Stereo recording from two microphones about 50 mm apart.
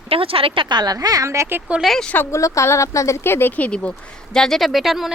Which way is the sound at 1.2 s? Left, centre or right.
Right.